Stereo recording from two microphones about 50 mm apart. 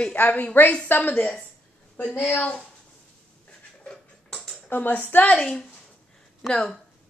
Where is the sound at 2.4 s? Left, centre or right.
Left.